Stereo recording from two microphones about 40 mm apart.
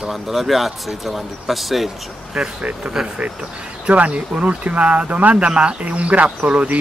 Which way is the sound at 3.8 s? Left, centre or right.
Right.